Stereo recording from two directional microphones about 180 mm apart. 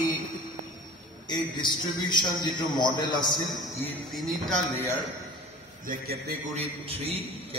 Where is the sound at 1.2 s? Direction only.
25° left (ahead or behind).